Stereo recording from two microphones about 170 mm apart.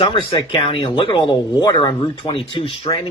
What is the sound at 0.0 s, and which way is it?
Speech, 30° left (ahead or behind).